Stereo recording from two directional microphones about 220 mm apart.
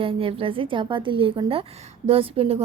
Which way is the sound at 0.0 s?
25° right (ahead or behind).